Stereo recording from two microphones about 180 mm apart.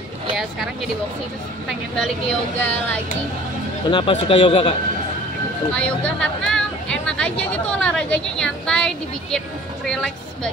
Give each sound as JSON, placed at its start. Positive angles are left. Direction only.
{"t": 1.7, "sound": "speech", "side_deg": 0}
{"t": 3.9, "sound": "a man's voice", "side_deg": 30}
{"t": 5.8, "sound": "speech", "side_deg": 5}